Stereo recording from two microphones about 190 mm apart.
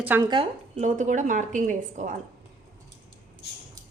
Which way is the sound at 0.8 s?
40° right (ahead or behind).